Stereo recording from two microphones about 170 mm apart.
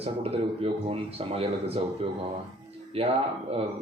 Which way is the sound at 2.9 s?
35° right (ahead or behind).